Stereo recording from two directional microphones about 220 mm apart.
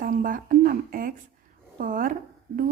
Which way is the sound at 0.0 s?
40° right (ahead or behind).